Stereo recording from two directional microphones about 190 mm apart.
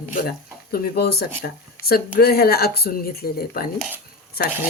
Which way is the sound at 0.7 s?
55° left (ahead or behind).